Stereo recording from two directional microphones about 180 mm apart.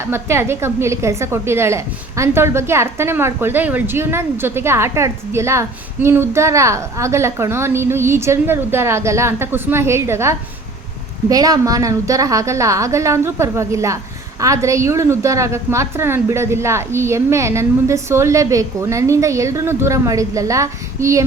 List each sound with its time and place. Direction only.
0.1 s a woman's voice: 15° right (ahead or behind)